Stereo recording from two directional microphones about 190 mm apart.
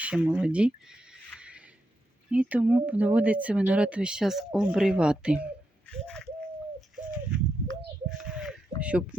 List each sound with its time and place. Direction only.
0.0 s speech: 5° right (ahead or behind)
1.4 s a sound: 5° right (ahead or behind)
2.3 s speech: 5° right (ahead or behind)
5.8 s pigeon: 5° left (ahead or behind)
6.9 s bird: 5° right (ahead or behind)
8.2 s a sound: 5° right (ahead or behind)